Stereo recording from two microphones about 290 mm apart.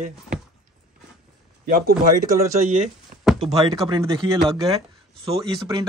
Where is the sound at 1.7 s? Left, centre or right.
Right.